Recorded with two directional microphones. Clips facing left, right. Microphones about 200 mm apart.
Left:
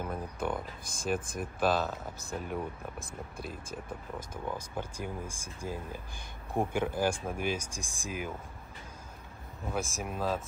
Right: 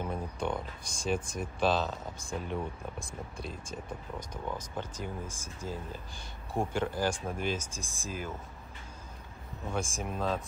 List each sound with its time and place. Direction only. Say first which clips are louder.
0.0 s music: right 1 dB; 5° left (ahead or behind)
0.8 s speech: even; 55° left (ahead or behind)
1.6 s speech: even; 5° left (ahead or behind)
4.5 s speech: left 1 dB; 10° left (ahead or behind)
9.7 s speech: even; 5° left (ahead or behind)